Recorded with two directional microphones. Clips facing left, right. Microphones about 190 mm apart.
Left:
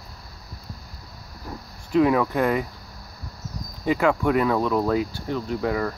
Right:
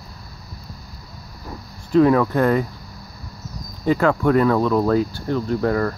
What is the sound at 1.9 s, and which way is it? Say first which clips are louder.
Speech: right 4 dB; 10° left (ahead or behind).